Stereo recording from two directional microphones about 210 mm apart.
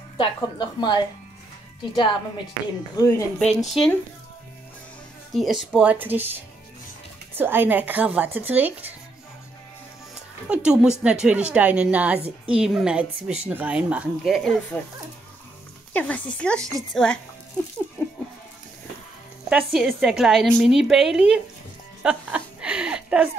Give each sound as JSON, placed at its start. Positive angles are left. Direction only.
{"t": 0.2, "sound": "a woman's voice", "side_deg": 20}
{"t": 2.0, "sound": "a woman's voice", "side_deg": 20}
{"t": 3.3, "sound": "a woman's voice", "side_deg": 0}
{"t": 5.3, "sound": "a woman's voice", "side_deg": 0}
{"t": 7.3, "sound": "speech", "side_deg": -10}
{"t": 10.5, "sound": "a woman's voice", "side_deg": -5}
{"t": 15.9, "sound": "a woman's voice", "side_deg": 5}
{"t": 19.5, "sound": "a woman's voice", "side_deg": -5}
{"t": 22.0, "sound": "a sound", "side_deg": -5}